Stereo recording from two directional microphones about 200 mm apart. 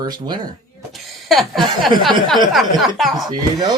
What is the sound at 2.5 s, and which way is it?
Speech, centre (ahead or behind).